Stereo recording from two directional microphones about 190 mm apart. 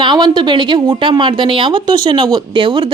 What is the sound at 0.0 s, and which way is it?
Speech, 20° right (ahead or behind).